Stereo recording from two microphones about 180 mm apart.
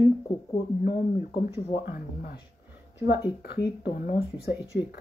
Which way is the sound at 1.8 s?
60° left (ahead or behind).